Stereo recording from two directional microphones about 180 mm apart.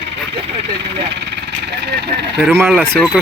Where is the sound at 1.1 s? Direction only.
70° right (ahead or behind).